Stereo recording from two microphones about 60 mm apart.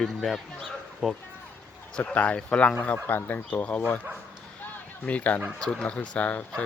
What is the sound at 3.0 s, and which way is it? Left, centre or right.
Speech, left.